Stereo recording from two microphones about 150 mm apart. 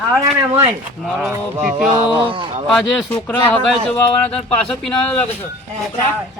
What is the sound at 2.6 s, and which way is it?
Speech, 5° left (ahead or behind).